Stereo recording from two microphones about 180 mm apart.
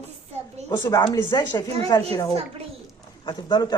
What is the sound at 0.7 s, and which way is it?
Speech, 20° left (ahead or behind).